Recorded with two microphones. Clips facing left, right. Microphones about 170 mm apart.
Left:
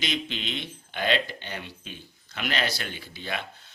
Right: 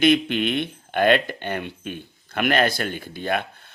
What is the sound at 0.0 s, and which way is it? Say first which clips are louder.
A man's voice: right 13 dB; 55° right (ahead or behind).